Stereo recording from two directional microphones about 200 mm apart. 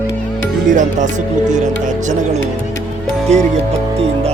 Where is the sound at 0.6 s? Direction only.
40° right (ahead or behind).